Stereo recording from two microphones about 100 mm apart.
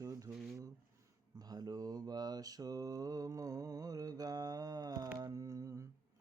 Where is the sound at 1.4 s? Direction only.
40° right (ahead or behind).